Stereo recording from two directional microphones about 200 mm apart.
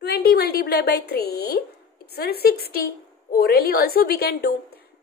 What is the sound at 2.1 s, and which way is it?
A woman's voice, 50° left (ahead or behind).